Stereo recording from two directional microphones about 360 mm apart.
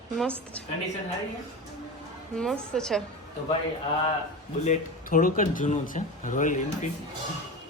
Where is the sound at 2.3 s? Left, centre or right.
Centre.